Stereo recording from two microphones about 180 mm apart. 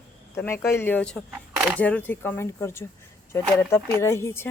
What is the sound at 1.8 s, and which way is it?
A man's voice, 10° left (ahead or behind).